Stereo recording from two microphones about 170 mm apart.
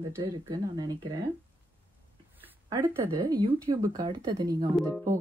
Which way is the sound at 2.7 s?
15° right (ahead or behind).